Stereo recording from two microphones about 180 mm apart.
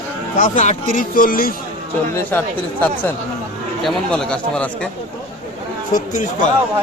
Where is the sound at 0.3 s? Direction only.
45° left (ahead or behind).